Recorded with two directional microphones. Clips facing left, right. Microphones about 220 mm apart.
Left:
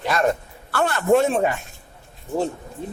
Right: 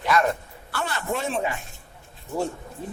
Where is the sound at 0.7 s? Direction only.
55° left (ahead or behind).